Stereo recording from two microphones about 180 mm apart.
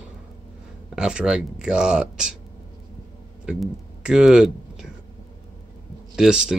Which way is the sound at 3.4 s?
5° right (ahead or behind).